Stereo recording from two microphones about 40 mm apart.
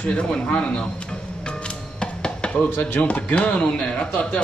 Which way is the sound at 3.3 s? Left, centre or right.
Left.